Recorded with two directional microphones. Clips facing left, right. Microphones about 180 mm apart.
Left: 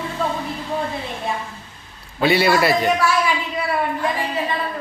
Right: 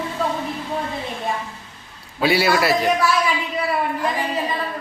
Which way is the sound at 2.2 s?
5° right (ahead or behind).